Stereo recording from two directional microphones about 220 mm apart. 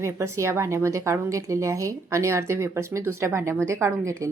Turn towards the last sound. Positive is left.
turn(degrees=-15)  # may be behind; listen again after turning